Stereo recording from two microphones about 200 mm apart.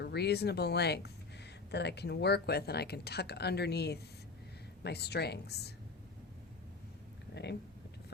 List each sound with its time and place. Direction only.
0.0 s speech: 55° left (ahead or behind)